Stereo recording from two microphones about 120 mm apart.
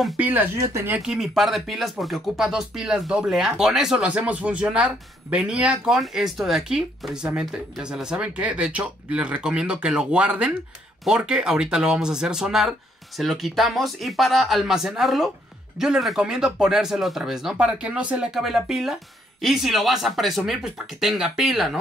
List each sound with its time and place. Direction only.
0.2 s speech: 15° right (ahead or behind)
1.0 s speech: 5° right (ahead or behind)